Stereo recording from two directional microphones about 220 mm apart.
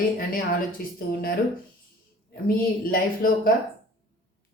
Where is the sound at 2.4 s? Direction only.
40° left (ahead or behind).